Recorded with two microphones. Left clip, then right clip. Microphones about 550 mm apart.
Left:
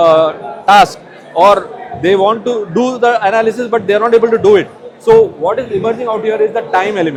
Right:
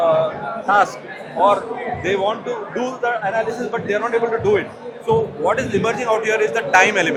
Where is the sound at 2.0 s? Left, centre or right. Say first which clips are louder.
Left 11 dB; left.